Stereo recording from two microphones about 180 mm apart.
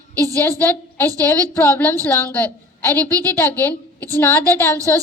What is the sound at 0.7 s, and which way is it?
A woman's voice, 10° left (ahead or behind).